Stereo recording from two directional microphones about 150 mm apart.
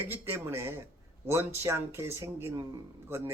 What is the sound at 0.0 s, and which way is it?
Speech, 15° right (ahead or behind).